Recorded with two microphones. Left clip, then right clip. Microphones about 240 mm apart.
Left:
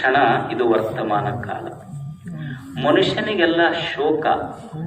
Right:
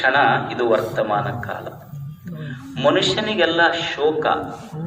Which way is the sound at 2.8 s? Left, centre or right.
Right.